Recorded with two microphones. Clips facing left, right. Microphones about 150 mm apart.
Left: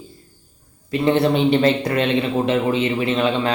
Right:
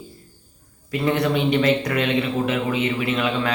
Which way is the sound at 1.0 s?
30° left (ahead or behind).